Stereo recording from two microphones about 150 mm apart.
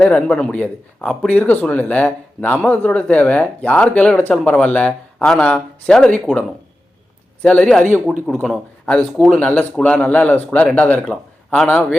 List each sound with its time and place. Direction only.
0.0 s a man's voice: 5° left (ahead or behind)
7.4 s a man's voice: 10° left (ahead or behind)